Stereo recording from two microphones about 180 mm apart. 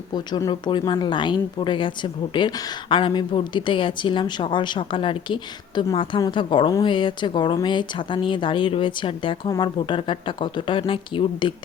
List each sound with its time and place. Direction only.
0.1 s a woman's voice: 20° left (ahead or behind)